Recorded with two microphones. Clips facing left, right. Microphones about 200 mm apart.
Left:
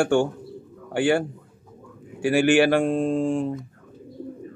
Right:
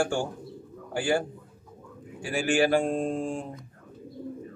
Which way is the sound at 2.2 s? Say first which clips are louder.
Left 7 dB; 70° left (ahead or behind).